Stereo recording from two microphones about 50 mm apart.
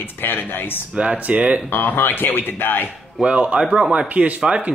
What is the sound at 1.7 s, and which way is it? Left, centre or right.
Speech, left.